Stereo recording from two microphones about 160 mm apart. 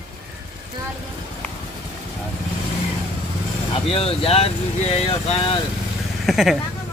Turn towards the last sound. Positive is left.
turn(degrees=0)  # may be behind; listen again after turning